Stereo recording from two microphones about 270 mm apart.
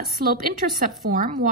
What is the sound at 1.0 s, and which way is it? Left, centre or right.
Speech, right.